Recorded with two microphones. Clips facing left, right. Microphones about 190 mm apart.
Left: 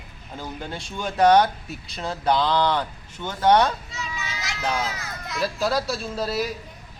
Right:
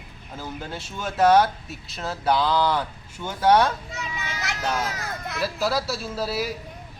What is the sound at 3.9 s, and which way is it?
Children playing, 55° right (ahead or behind).